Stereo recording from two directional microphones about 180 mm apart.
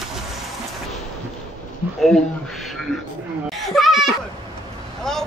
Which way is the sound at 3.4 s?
Centre (ahead or behind).